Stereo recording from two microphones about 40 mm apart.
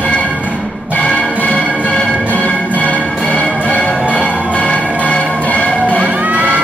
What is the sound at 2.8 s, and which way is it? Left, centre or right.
Music, left.